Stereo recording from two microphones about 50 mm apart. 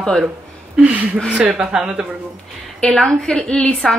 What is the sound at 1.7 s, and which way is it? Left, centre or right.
Speech, centre.